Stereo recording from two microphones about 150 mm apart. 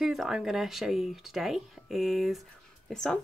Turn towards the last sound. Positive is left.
turn(degrees=5)  # may be behind; listen again after turning